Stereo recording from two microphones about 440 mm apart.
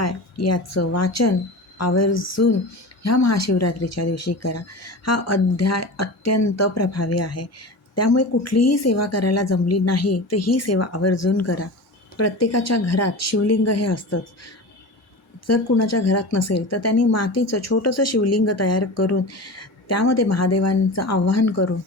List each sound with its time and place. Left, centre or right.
0.0 s speech: left